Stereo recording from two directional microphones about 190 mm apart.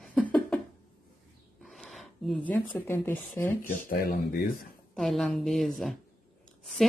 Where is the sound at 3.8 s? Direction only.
50° left (ahead or behind).